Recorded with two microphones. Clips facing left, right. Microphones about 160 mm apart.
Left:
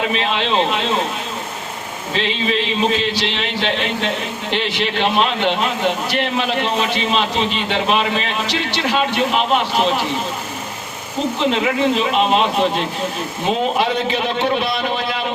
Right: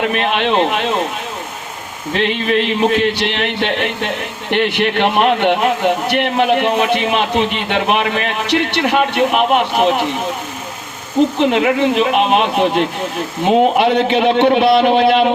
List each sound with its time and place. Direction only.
0.0 s a man's voice: 60° right (ahead or behind)
2.1 s a man's voice: 60° right (ahead or behind)
11.3 s a man's voice: 60° right (ahead or behind)
13.5 s a man's voice: 60° right (ahead or behind)